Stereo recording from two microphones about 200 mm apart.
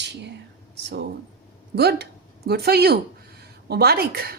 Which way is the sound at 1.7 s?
55° right (ahead or behind).